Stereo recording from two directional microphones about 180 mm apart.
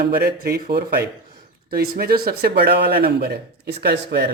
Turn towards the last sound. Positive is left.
turn(degrees=-65)  # may be behind; listen again after turning